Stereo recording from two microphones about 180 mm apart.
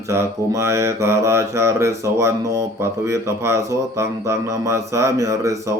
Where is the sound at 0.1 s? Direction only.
15° right (ahead or behind).